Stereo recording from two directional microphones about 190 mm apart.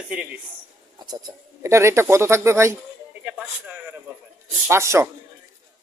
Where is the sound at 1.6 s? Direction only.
15° right (ahead or behind).